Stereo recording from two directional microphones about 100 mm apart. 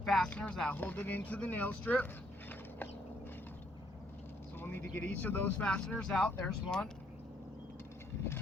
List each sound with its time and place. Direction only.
0.0 s music: 5° left (ahead or behind)
0.3 s speech: 15° left (ahead or behind)
2.5 s a sound: 20° left (ahead or behind)
4.6 s speech: 20° left (ahead or behind)